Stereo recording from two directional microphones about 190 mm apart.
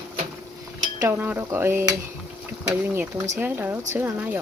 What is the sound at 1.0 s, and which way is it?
Cutlery, 10° right (ahead or behind).